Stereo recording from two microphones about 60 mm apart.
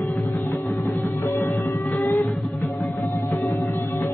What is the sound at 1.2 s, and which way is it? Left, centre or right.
Music, left.